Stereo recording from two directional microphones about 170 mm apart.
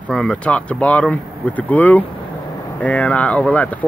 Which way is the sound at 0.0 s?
5° left (ahead or behind).